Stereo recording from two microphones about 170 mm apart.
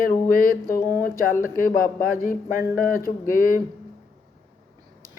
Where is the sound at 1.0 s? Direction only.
55° left (ahead or behind).